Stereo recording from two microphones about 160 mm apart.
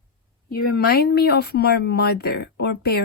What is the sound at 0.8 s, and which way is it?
Speech, 75° left (ahead or behind).